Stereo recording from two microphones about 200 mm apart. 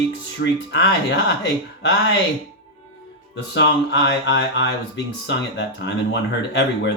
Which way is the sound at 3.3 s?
60° left (ahead or behind).